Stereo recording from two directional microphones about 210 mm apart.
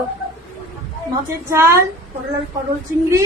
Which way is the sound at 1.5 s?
15° right (ahead or behind).